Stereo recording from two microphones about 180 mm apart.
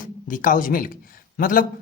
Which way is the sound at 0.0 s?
45° left (ahead or behind).